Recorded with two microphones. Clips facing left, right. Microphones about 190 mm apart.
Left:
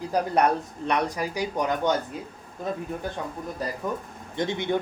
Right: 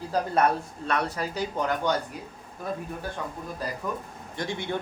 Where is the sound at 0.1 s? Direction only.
15° left (ahead or behind).